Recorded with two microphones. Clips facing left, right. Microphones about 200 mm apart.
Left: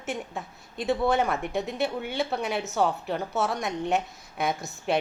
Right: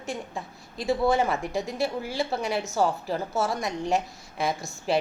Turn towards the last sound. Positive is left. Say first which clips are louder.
# right 1 dB
turn(degrees=0)  # may be behind; listen again after turning